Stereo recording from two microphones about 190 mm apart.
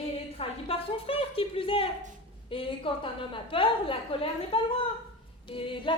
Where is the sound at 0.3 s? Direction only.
30° left (ahead or behind).